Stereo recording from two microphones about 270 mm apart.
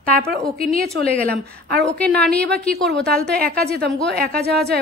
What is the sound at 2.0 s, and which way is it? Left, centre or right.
Speech, centre.